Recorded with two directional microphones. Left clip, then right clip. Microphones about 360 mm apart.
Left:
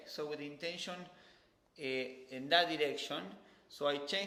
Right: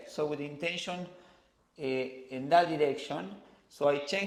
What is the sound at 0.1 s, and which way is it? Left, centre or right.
Speech, right.